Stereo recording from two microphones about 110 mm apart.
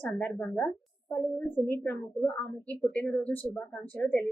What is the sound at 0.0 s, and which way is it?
A woman's voice, 15° left (ahead or behind).